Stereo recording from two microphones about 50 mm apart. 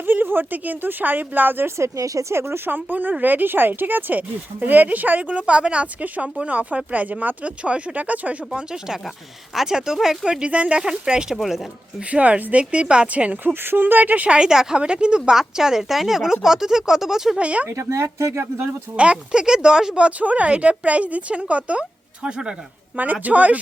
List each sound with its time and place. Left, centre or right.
0.0 s speech: right
1.7 s speech: right
2.6 s speech: right
8.5 s speech: centre
10.4 s speech: right
11.3 s speech: centre
11.9 s speech: right
13.4 s speech: right
14.3 s speech: centre
17.3 s speech: right
17.7 s speech: right
18.9 s speech: right
20.1 s speech: right
23.2 s speech: right